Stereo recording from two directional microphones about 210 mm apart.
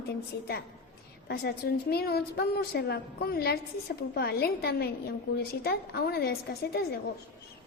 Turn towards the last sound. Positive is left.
turn(degrees=50)  # may be behind; listen again after turning